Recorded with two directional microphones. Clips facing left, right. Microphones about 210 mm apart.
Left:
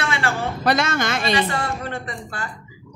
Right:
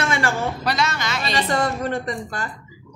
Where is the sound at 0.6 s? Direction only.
50° left (ahead or behind).